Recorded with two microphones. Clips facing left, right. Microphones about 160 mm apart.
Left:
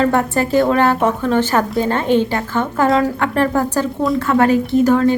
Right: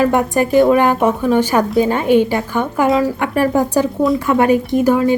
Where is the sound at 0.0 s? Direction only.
15° right (ahead or behind).